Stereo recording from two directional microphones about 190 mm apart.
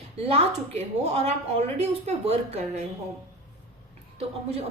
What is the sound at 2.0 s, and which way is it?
Speech, 35° right (ahead or behind).